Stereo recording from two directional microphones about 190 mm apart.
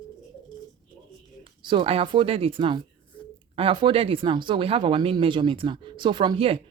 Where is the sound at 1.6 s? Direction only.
25° right (ahead or behind).